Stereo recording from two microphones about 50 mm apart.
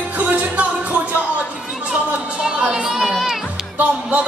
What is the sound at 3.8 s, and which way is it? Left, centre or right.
Music, right.